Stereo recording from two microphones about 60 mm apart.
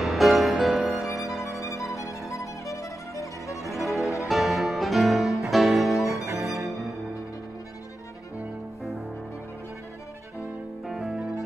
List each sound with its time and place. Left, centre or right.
0.0 s music: centre
1.6 s music: left
3.7 s music: centre
6.2 s music: right
10.9 s music: centre